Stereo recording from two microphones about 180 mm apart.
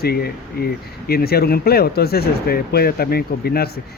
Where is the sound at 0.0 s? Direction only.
60° left (ahead or behind).